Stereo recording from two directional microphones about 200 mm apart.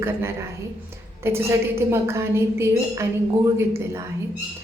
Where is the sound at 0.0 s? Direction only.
10° right (ahead or behind).